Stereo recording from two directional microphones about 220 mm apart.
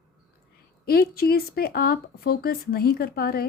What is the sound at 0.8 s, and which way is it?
Speech, 45° left (ahead or behind).